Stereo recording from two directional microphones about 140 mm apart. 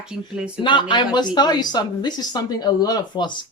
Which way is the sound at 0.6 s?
35° left (ahead or behind).